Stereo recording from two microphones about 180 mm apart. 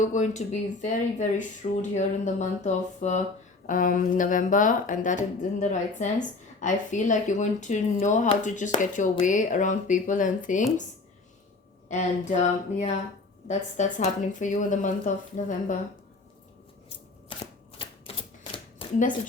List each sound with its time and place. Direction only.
0.0 s speech: 40° left (ahead or behind)
11.9 s speech: 40° left (ahead or behind)
17.2 s a sound: 30° left (ahead or behind)
18.9 s speech: 45° left (ahead or behind)